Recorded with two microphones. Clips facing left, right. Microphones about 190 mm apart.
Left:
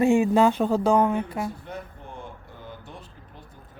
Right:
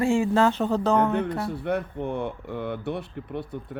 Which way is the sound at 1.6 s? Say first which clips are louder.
Right 11 dB; 65° right (ahead or behind).